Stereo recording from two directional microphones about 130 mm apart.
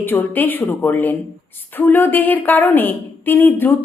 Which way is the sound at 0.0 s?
15° left (ahead or behind).